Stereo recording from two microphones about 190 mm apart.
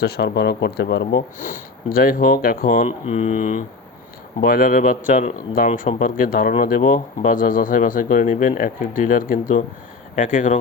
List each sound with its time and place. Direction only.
0.0 s speech: 55° left (ahead or behind)
1.4 s speech: 40° left (ahead or behind)